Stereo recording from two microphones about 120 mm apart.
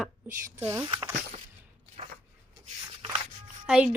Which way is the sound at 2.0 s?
60° right (ahead or behind).